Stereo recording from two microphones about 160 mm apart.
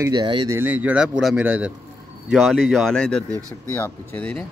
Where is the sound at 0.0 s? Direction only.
25° right (ahead or behind).